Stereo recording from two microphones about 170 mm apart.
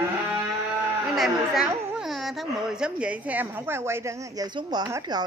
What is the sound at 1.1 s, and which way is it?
A woman's voice, centre (ahead or behind).